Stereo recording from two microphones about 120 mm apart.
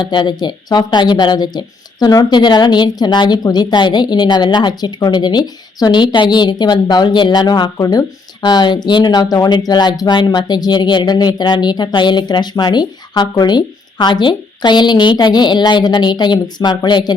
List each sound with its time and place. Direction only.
0.0 s speech: 40° left (ahead or behind)